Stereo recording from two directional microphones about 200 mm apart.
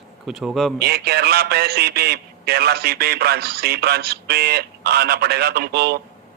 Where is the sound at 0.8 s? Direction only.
55° right (ahead or behind).